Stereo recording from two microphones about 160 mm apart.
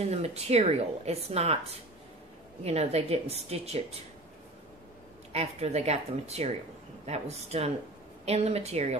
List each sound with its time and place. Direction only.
0.1 s a woman's voice: 40° right (ahead or behind)
5.3 s a woman's voice: 40° right (ahead or behind)